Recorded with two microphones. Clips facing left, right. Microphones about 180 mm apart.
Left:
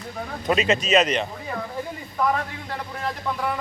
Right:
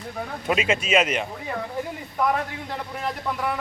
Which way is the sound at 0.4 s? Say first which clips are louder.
Left 2 dB; 10° right (ahead or behind).